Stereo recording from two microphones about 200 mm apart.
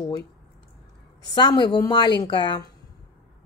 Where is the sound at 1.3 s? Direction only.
20° left (ahead or behind).